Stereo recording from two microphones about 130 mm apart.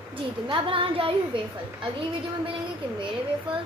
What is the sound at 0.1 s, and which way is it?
A woman's voice, 40° right (ahead or behind).